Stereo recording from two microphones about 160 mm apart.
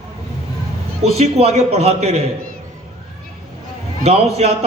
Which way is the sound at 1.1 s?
40° right (ahead or behind).